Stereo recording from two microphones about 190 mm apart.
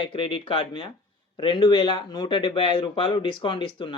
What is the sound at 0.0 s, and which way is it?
Speech, 25° left (ahead or behind).